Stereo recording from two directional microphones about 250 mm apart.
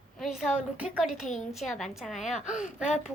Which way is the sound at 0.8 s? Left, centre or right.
Centre.